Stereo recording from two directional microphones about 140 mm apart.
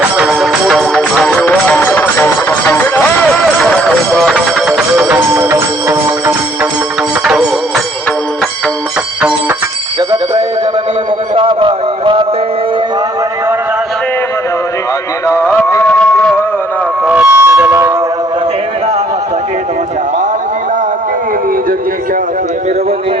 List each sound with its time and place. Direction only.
0.0 s music: 5° right (ahead or behind); by 3.4 s 15° left (ahead or behind)
3.4 s music: 5° left (ahead or behind); by 6.3 s 15° right (ahead or behind)
11.3 s music: 35° right (ahead or behind)
15.3 s music: 15° left (ahead or behind)
17.1 s train: 10° right (ahead or behind)